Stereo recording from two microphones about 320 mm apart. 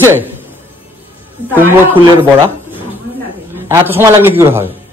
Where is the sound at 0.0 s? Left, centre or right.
Centre.